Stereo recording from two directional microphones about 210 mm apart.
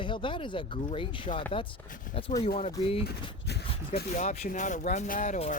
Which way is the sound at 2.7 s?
25° left (ahead or behind).